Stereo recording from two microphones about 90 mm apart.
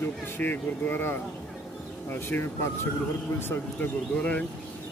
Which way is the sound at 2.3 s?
25° left (ahead or behind).